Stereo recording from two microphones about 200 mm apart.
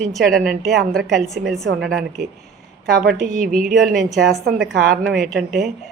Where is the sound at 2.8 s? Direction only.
50° right (ahead or behind).